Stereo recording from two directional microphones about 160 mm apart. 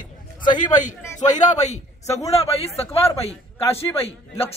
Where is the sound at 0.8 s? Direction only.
50° left (ahead or behind).